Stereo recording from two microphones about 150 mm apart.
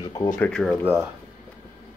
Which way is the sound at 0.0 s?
25° left (ahead or behind).